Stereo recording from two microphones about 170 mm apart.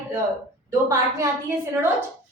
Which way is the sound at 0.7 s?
15° right (ahead or behind).